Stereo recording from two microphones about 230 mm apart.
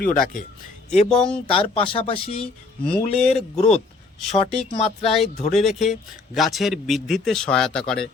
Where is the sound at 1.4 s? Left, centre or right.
Left.